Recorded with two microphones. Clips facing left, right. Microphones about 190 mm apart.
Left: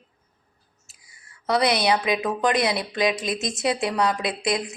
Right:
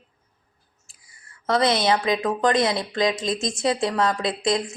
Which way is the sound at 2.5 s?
20° right (ahead or behind).